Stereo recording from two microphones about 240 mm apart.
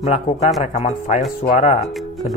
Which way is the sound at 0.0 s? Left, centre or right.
Left.